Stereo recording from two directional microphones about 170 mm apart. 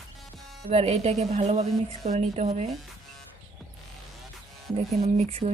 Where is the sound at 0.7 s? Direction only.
40° right (ahead or behind).